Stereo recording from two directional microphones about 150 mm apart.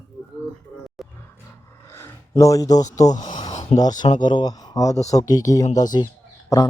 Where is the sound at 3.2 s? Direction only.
50° left (ahead or behind).